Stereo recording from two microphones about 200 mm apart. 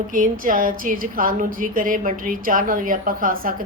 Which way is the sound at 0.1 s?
40° right (ahead or behind).